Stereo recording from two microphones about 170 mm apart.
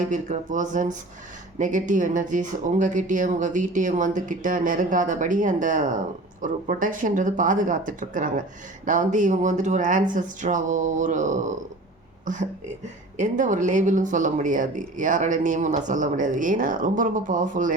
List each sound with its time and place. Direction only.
0.0 s speech: 45° right (ahead or behind)